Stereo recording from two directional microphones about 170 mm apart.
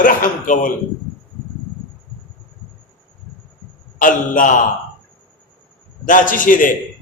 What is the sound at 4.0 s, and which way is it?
Speech, 50° left (ahead or behind).